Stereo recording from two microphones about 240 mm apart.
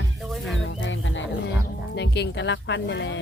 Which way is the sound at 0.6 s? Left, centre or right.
Left.